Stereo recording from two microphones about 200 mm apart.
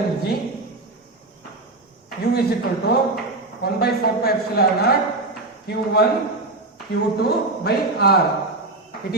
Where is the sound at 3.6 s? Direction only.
50° left (ahead or behind).